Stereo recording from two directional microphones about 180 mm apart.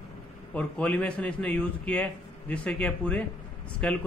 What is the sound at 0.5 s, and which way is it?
A man's voice, 5° left (ahead or behind).